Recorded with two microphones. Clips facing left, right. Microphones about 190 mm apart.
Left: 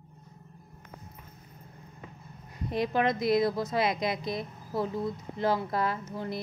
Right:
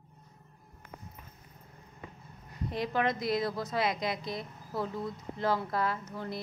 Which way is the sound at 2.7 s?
15° left (ahead or behind).